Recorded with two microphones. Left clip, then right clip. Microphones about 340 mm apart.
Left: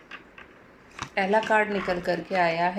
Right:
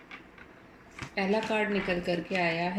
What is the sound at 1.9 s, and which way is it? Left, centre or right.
Speech, centre.